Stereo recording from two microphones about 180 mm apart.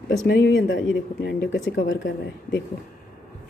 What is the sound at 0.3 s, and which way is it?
Speech, 90° left.